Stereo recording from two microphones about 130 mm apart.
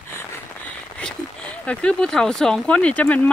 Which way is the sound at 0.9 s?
10° left (ahead or behind).